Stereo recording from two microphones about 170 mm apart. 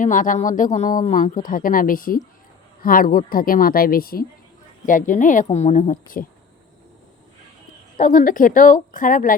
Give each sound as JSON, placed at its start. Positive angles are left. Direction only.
{"t": 0.0, "sound": "a woman's voice", "side_deg": 50}
{"t": 7.9, "sound": "speech", "side_deg": 50}